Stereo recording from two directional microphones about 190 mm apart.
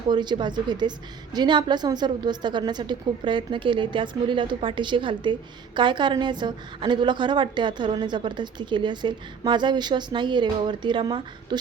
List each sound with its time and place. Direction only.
0.1 s a woman's voice: 25° right (ahead or behind)